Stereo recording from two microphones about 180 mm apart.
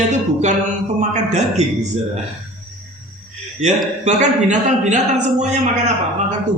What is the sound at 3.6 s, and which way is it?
A man's voice, 40° right (ahead or behind).